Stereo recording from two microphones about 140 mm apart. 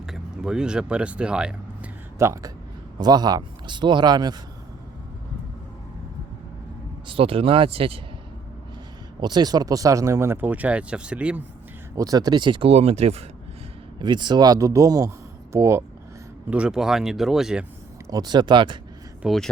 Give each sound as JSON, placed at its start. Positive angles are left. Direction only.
{"t": 0.1, "sound": "speech", "side_deg": -5}
{"t": 2.1, "sound": "speech", "side_deg": -20}
{"t": 7.1, "sound": "speech", "side_deg": -40}
{"t": 9.2, "sound": "speech", "side_deg": -30}
{"t": 11.9, "sound": "speech", "side_deg": -25}
{"t": 14.0, "sound": "speech", "side_deg": -30}
{"t": 16.5, "sound": "speech", "side_deg": -5}
{"t": 18.1, "sound": "speech", "side_deg": -30}
{"t": 19.2, "sound": "speech", "side_deg": 0}